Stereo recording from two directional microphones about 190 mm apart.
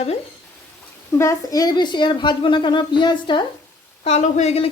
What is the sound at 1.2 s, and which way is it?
Speech, 15° left (ahead or behind).